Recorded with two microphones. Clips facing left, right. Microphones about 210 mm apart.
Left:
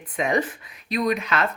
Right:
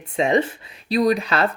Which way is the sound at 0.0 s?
25° right (ahead or behind).